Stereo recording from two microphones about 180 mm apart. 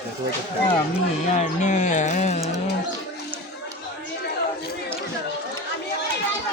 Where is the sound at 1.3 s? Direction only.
40° left (ahead or behind).